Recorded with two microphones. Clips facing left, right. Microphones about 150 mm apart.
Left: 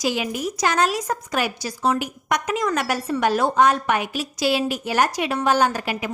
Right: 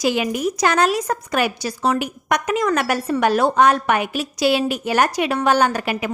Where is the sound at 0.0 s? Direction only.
60° right (ahead or behind).